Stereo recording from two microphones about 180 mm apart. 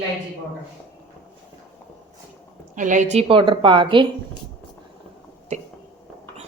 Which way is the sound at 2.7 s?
45° right (ahead or behind).